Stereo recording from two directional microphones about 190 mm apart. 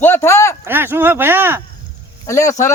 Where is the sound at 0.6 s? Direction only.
10° right (ahead or behind).